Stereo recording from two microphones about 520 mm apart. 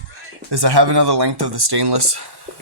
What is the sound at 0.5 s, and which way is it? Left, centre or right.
Speech, right.